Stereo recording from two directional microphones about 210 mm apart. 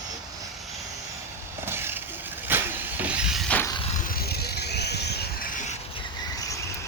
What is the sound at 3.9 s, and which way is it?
Vehicle, 40° left (ahead or behind).